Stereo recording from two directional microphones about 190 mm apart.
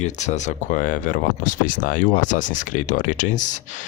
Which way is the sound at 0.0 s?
40° left (ahead or behind).